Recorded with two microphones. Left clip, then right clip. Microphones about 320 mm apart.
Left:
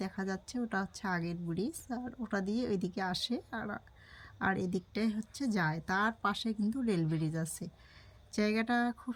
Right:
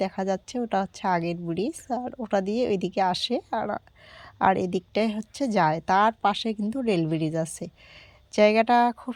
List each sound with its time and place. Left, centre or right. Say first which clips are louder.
0.0 s a woman's voice: right 13 dB; centre